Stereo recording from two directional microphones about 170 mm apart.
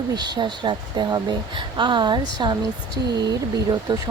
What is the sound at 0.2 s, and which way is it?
Speech, 25° right (ahead or behind).